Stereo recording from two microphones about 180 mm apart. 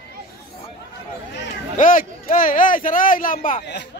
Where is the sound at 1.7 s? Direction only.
50° left (ahead or behind).